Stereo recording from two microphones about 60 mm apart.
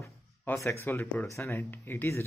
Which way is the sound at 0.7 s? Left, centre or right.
Left.